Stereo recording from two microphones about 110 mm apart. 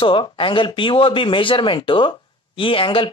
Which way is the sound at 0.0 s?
50° left (ahead or behind).